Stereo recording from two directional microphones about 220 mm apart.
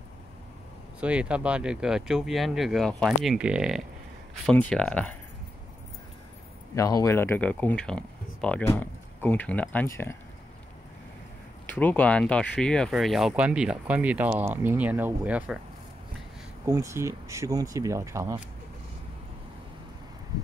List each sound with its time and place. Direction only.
1.0 s speech: 5° right (ahead or behind)
6.7 s speech: 15° left (ahead or behind)
11.6 s speech: 5° left (ahead or behind)
16.6 s speech: 10° right (ahead or behind)